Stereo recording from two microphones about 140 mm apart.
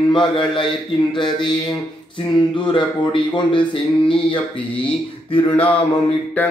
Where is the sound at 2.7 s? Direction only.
35° left (ahead or behind).